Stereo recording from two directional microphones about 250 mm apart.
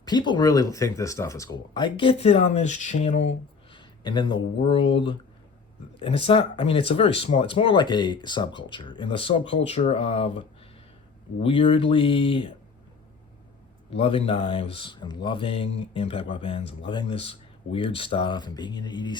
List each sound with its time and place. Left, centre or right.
0.0 s speech: centre
11.4 s speech: left
13.9 s speech: left